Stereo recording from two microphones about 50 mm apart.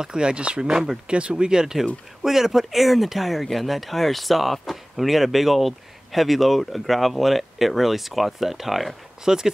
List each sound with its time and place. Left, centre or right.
0.0 s speech: centre
1.0 s speech: right